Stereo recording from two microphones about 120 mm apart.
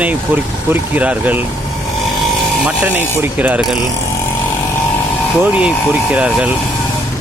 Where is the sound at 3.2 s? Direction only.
15° right (ahead or behind).